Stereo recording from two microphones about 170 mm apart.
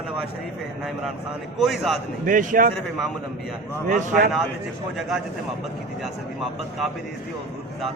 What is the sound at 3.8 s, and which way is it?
Speech, 50° right (ahead or behind).